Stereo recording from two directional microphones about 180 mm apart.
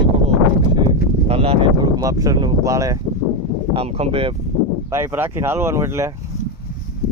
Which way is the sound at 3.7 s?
30° right (ahead or behind).